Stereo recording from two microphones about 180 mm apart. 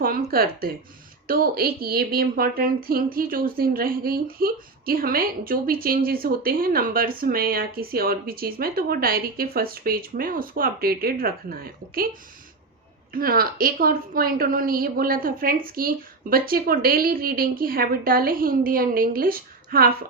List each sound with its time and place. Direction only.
0.0 s speech: 55° right (ahead or behind)
13.1 s a woman's voice: 55° right (ahead or behind)